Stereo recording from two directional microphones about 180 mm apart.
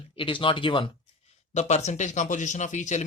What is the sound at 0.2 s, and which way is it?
Speech, 30° left (ahead or behind).